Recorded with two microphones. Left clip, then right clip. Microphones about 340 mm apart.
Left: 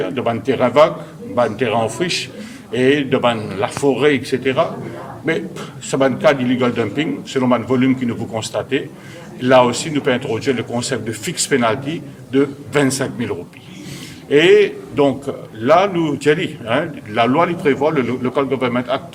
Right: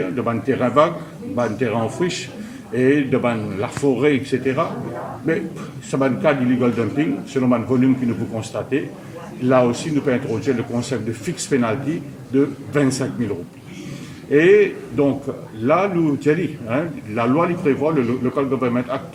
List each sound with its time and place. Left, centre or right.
0.2 s a man's voice: left
14.3 s a man's voice: left